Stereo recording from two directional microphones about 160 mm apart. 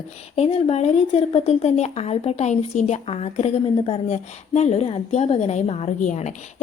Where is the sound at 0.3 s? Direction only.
40° left (ahead or behind).